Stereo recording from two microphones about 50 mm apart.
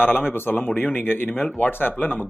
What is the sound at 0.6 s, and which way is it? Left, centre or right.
Speech, left.